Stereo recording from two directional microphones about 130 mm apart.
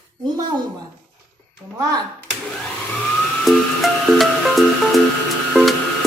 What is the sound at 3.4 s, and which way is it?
Music, centre (ahead or behind).